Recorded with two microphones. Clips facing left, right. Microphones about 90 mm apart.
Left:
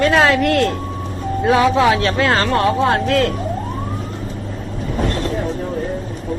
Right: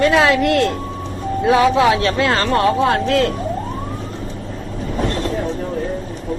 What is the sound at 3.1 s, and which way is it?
Speech, 30° right (ahead or behind).